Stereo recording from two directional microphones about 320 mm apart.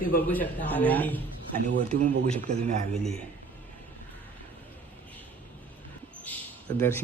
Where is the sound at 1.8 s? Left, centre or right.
Right.